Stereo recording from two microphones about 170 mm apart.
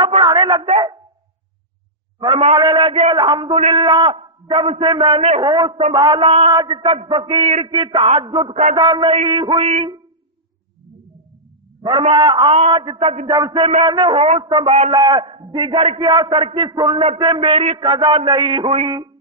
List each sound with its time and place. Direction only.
0.0 s a man's voice: 30° right (ahead or behind)
2.1 s a man's voice: 30° right (ahead or behind)
11.8 s a man's voice: 30° right (ahead or behind)